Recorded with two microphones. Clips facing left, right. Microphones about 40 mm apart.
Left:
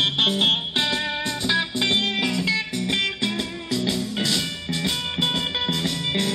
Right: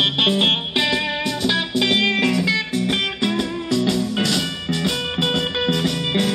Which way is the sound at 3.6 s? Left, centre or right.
Centre.